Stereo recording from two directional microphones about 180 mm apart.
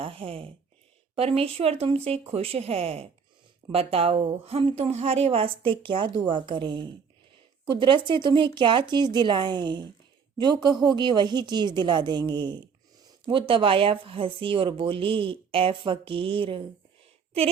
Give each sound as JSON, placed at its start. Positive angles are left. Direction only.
{"t": 0.0, "sound": "a woman's voice", "side_deg": -30}